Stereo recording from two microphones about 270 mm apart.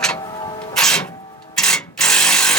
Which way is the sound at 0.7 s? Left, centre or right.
Centre.